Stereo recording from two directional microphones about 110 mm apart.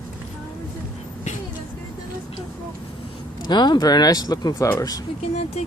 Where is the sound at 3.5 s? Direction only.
40° left (ahead or behind).